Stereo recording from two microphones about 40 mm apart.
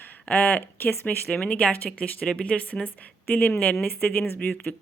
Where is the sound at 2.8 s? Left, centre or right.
Left.